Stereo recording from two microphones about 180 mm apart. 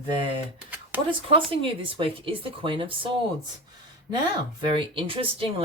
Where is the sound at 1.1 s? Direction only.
30° right (ahead or behind).